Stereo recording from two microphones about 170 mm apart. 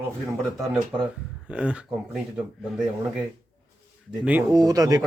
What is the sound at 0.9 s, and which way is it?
Speech, 25° right (ahead or behind).